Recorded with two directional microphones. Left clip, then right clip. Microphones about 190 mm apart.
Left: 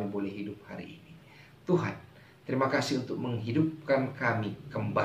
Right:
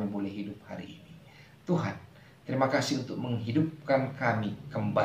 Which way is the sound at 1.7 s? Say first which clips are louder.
Left 3 dB; 10° left (ahead or behind).